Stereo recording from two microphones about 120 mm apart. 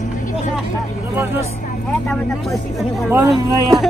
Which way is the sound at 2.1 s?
Centre (ahead or behind).